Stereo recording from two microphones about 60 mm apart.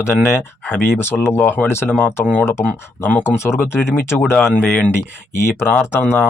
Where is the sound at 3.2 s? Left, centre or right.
Left.